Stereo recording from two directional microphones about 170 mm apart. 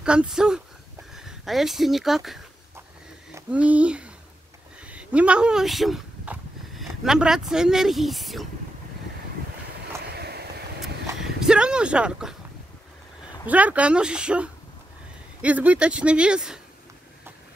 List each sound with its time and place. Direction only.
0.0 s speech: 5° right (ahead or behind)
10.1 s vehicle: 70° right (ahead or behind)
11.1 s a sound: 5° right (ahead or behind)
13.5 s speech: 10° right (ahead or behind)